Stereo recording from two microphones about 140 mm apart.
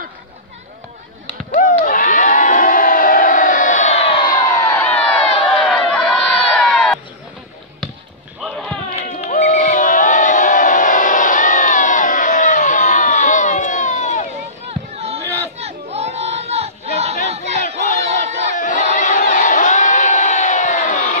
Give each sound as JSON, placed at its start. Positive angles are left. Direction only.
{"t": 1.6, "sound": "crowd", "side_deg": 75}
{"t": 4.6, "sound": "crowd", "side_deg": 15}
{"t": 8.4, "sound": "basketball bounce", "side_deg": 5}
{"t": 9.1, "sound": "crowd", "side_deg": 60}
{"t": 14.7, "sound": "a sound", "side_deg": -45}
{"t": 15.2, "sound": "chatter", "side_deg": 15}
{"t": 15.5, "sound": "crowd", "side_deg": -50}
{"t": 18.6, "sound": "crowd", "side_deg": 65}